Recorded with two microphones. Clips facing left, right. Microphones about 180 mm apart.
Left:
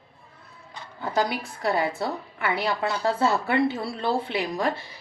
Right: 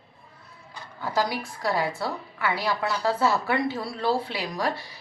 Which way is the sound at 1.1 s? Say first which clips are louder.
Left 1 dB; 20° left (ahead or behind).